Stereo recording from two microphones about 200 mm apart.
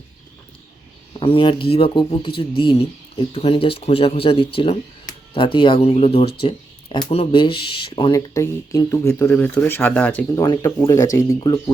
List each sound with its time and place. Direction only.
1.2 s speech: 25° left (ahead or behind)
6.4 s a sound: 25° left (ahead or behind)
7.1 s speech: 30° left (ahead or behind)
8.3 s speech: 15° left (ahead or behind)
10.4 s speech: 20° left (ahead or behind)